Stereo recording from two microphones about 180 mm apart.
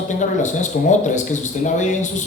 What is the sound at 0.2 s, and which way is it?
Speech, 40° left (ahead or behind).